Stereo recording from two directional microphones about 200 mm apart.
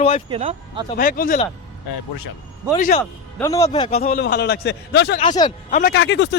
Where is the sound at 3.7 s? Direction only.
30° left (ahead or behind).